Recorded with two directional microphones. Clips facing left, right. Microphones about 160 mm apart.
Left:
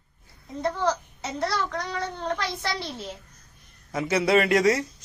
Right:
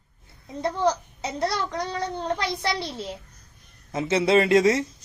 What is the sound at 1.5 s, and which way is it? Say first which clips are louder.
Speech: even; 15° right (ahead or behind).